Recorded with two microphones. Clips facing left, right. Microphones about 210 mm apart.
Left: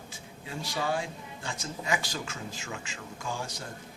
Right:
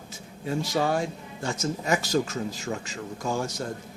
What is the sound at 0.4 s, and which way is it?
Speech, 45° right (ahead or behind).